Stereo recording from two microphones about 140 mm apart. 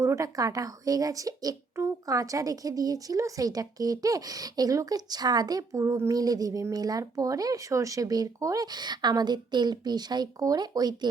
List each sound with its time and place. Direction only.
0.0 s speech: 20° right (ahead or behind)